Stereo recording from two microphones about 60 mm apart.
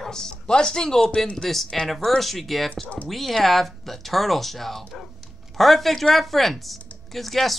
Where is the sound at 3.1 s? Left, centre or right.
Centre.